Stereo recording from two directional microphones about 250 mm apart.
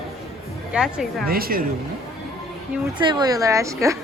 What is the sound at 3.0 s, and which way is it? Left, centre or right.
Speech, centre.